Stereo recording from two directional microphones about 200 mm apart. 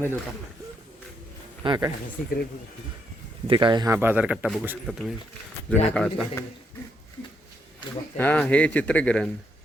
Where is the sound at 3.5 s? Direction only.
25° right (ahead or behind); by 6.3 s centre (ahead or behind).